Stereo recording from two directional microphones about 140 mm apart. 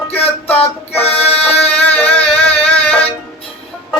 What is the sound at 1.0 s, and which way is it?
Music, 45° left (ahead or behind).